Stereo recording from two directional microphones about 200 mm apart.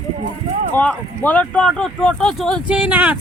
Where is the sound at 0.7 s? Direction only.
5° left (ahead or behind).